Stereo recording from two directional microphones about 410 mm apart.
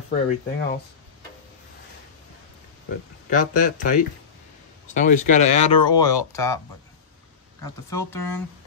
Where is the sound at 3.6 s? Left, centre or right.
Centre.